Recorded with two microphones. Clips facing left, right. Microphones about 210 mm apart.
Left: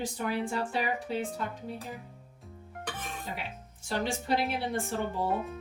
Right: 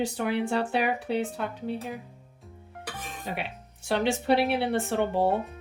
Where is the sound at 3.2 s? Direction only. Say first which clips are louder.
Right 5 dB; 70° right (ahead or behind).